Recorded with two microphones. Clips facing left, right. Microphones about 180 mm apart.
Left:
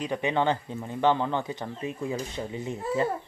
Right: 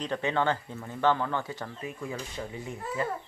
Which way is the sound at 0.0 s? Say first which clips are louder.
Left 2 dB; 15° left (ahead or behind).